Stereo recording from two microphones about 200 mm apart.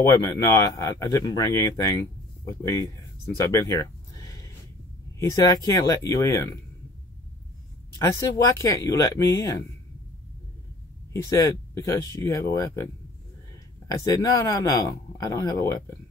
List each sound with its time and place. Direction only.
0.1 s speech: 20° left (ahead or behind)
8.2 s speech: 15° left (ahead or behind)
11.2 s speech: 15° left (ahead or behind)
14.0 s speech: 20° left (ahead or behind)